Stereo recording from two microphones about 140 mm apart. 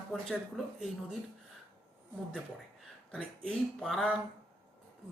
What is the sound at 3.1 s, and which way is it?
Speech, 5° left (ahead or behind).